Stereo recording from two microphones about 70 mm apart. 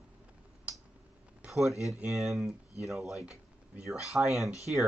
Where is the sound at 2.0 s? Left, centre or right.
Centre.